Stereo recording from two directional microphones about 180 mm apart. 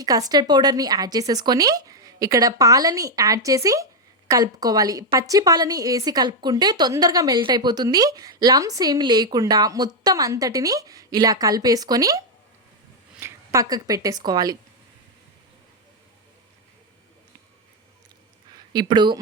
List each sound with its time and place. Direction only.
0.0 s a woman's voice: 20° right (ahead or behind)
18.5 s speech: 25° right (ahead or behind)